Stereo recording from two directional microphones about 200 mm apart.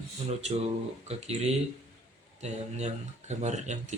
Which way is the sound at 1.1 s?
30° right (ahead or behind).